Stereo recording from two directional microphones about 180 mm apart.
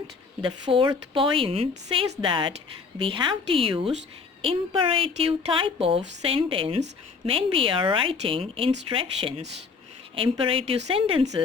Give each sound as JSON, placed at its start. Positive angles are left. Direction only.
{"t": 0.4, "sound": "a woman's voice", "side_deg": -30}